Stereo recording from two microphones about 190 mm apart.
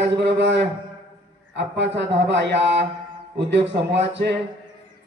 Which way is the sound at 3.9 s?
65° right (ahead or behind).